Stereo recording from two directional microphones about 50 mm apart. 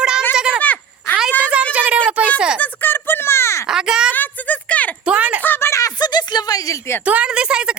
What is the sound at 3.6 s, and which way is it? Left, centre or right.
Speech, centre.